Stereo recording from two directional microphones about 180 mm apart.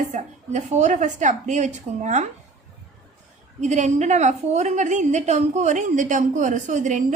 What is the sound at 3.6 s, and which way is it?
A woman's voice, 40° right (ahead or behind).